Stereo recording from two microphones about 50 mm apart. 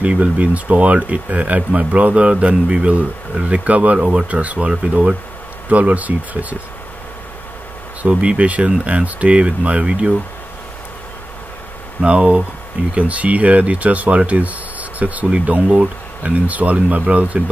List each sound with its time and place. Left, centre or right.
0.0 s speech: right
8.0 s speech: right
12.0 s speech: right